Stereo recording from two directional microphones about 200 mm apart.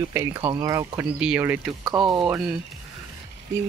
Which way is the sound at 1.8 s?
20° right (ahead or behind).